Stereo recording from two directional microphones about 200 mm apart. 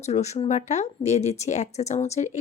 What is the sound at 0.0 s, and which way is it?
A woman's voice, 35° left (ahead or behind).